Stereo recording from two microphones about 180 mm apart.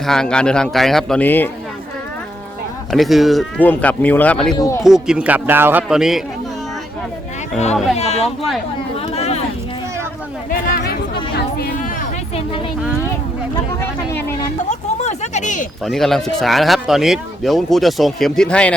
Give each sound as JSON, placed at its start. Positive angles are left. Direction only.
{"t": 0.0, "sound": "speech", "side_deg": 5}
{"t": 2.9, "sound": "speech", "side_deg": 0}
{"t": 4.5, "sound": "speech", "side_deg": 20}
{"t": 4.8, "sound": "speech", "side_deg": -5}
{"t": 7.9, "sound": "speech", "side_deg": 35}
{"t": 9.0, "sound": "a sound", "side_deg": 35}
{"t": 13.8, "sound": "a sound", "side_deg": 15}
{"t": 14.7, "sound": "a sound", "side_deg": 40}
{"t": 15.8, "sound": "speech", "side_deg": 0}